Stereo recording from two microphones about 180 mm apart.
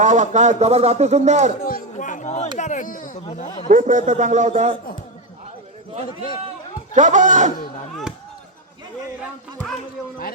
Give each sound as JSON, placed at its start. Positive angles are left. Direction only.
{"t": 0.0, "sound": "speech", "side_deg": -40}
{"t": 1.6, "sound": "a sound", "side_deg": 50}
{"t": 3.7, "sound": "a man's voice", "side_deg": -45}
{"t": 6.1, "sound": "a man's voice", "side_deg": 25}
{"t": 6.9, "sound": "a man's voice", "side_deg": -45}